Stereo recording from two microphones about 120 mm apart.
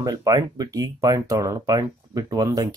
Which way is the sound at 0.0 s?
30° right (ahead or behind).